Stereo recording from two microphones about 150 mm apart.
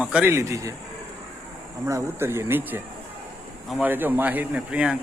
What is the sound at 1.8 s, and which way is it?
A man's voice, 20° right (ahead or behind).